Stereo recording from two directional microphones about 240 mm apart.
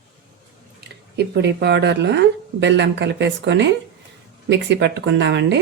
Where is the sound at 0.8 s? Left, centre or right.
Right.